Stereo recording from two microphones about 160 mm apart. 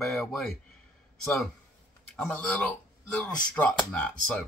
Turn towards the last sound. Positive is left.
turn(degrees=5)  # may be behind; listen again after turning